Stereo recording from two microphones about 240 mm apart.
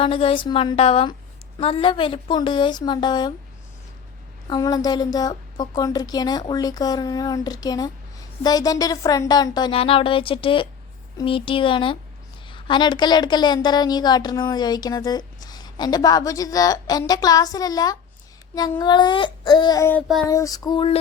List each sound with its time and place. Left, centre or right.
0.0 s a woman's voice: left
4.4 s a woman's voice: centre
20.3 s a woman's voice: centre